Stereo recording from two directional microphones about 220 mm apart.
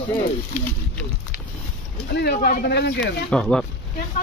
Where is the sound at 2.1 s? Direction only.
45° left (ahead or behind).